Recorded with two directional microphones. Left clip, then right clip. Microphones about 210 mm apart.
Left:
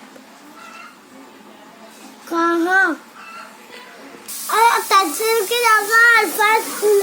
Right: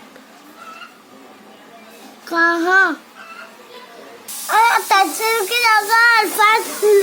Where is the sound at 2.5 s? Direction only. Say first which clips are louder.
Even; 25° right (ahead or behind).